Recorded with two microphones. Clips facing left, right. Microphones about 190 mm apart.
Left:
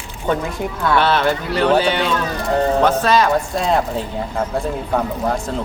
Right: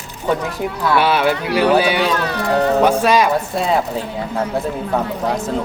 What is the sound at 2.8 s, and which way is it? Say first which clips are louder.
Speech: right 1 dB; 10° right (ahead or behind).